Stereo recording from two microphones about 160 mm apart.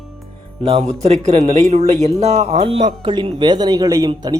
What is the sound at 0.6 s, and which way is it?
A man's voice, 40° right (ahead or behind).